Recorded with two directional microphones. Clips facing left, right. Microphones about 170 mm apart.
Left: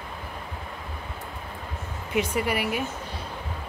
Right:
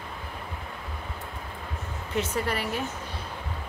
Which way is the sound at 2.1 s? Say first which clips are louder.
Left 3 dB; 10° left (ahead or behind).